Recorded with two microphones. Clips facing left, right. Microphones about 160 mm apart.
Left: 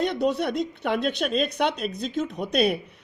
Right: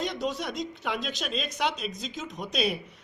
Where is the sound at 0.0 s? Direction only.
60° left (ahead or behind).